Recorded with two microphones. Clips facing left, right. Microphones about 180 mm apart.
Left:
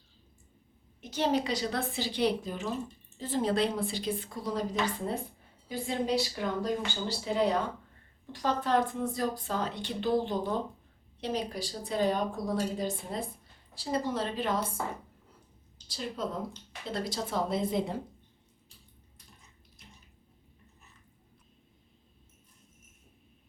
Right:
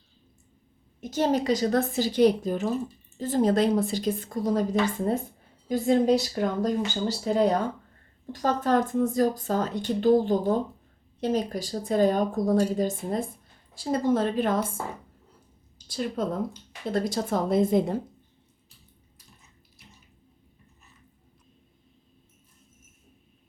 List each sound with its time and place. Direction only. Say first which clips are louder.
1.1 s a woman's voice: right 5 dB; 45° right (ahead or behind)
15.9 s a woman's voice: right 7 dB; 50° right (ahead or behind)